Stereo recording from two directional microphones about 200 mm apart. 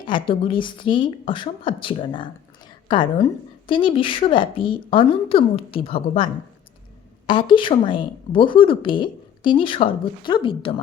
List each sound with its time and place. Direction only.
0.3 s a woman's voice: 25° left (ahead or behind)
7.3 s a woman's voice: 25° left (ahead or behind)